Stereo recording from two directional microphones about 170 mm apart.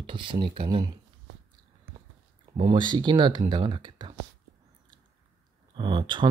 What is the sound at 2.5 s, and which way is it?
Speech, 30° right (ahead or behind).